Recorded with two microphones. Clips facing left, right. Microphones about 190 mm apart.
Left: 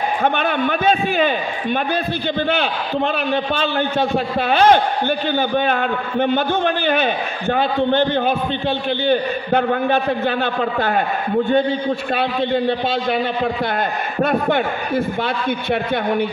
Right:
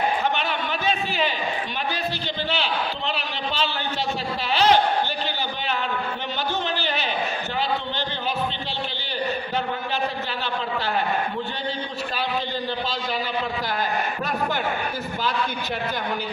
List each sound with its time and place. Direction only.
0.2 s a man's voice: 55° left (ahead or behind)
3.5 s a man's voice: 55° left (ahead or behind)
12.2 s a man's voice: 65° left (ahead or behind)
14.2 s a man's voice: 55° left (ahead or behind)